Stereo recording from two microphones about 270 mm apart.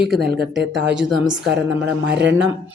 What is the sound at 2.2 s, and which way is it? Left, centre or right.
Speech, right.